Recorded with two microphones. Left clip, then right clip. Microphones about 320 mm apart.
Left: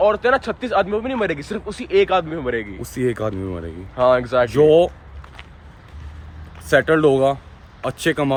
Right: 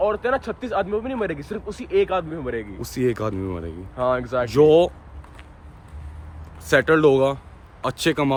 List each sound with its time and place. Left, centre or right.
0.0 s speech: left
2.9 s speech: centre
3.9 s speech: left
4.5 s speech: centre
6.7 s speech: centre